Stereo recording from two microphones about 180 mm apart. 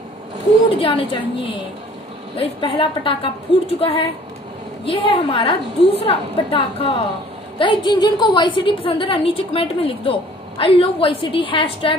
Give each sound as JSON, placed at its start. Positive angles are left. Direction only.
{"t": 0.7, "sound": "a woman's voice", "side_deg": 30}
{"t": 2.3, "sound": "a woman's voice", "side_deg": 30}